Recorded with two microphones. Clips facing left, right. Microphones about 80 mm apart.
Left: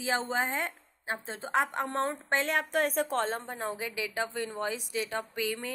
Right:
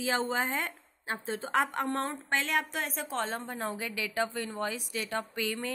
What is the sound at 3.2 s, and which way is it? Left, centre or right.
Speech, left.